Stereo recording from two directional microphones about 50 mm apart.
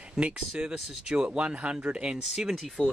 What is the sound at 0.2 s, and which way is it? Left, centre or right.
Speech, centre.